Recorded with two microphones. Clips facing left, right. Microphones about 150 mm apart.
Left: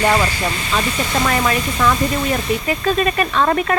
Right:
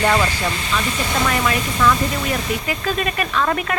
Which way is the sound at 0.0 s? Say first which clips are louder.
Left 1 dB; 15° left (ahead or behind).